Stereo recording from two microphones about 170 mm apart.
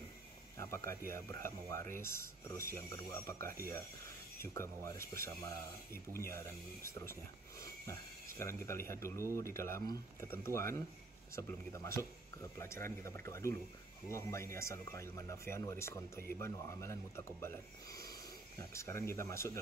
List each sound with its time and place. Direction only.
0.6 s a sound: 15° left (ahead or behind)
1.1 s speech: 15° left (ahead or behind)
8.4 s speech: 15° left (ahead or behind)